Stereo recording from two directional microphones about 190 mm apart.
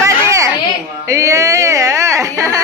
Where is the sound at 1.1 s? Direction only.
15° right (ahead or behind).